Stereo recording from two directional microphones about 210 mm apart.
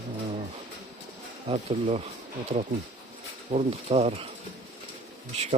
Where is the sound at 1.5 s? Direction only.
30° right (ahead or behind).